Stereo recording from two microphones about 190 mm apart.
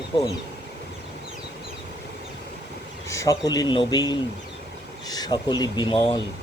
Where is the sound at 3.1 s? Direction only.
15° left (ahead or behind).